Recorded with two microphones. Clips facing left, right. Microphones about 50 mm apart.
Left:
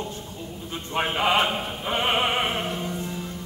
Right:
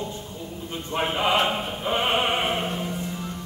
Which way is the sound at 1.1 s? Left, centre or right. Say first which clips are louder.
Left 1 dB; centre.